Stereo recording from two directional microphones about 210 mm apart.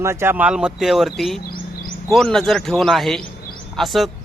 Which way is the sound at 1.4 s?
45° left (ahead or behind).